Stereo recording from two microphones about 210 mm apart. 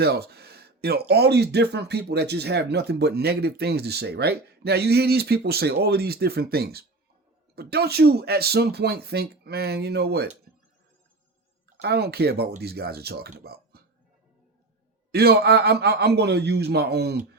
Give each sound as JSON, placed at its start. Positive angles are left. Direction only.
{"t": 0.0, "sound": "speech", "side_deg": -50}
{"t": 11.8, "sound": "speech", "side_deg": -50}
{"t": 13.3, "sound": "a sound", "side_deg": -45}
{"t": 15.1, "sound": "speech", "side_deg": -50}